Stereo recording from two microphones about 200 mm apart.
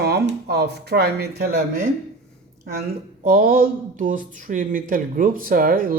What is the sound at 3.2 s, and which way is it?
Speech, 45° right (ahead or behind).